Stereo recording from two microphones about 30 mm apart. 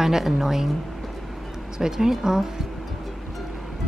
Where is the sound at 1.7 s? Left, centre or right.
Right.